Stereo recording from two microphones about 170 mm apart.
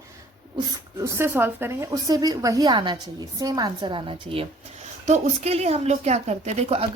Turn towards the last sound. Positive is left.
turn(degrees=-40)  # may be behind; listen again after turning